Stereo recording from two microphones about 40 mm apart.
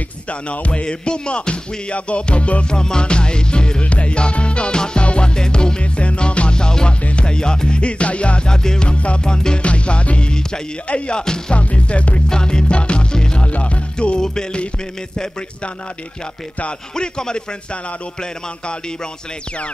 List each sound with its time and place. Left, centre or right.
0.3 s music: left
2.7 s music: centre
8.9 s music: left
9.2 s music: centre
9.6 s music: left
11.5 s music: left
12.3 s music: centre
13.4 s music: left
16.9 s music: centre